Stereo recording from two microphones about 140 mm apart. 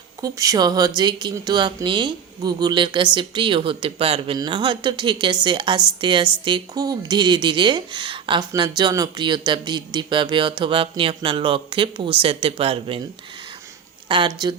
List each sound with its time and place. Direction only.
0.2 s speech: 25° right (ahead or behind); by 13.0 s 40° right (ahead or behind)
14.1 s speech: 35° right (ahead or behind)